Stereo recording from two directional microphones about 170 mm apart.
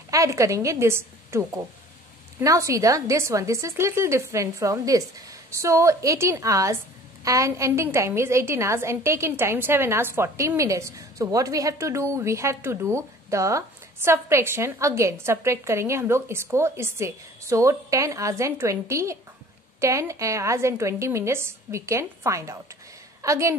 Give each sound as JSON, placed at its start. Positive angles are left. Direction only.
{"t": 0.1, "sound": "a woman's voice", "side_deg": -20}